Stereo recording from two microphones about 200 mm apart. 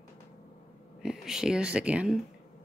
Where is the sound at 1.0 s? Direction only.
5° right (ahead or behind).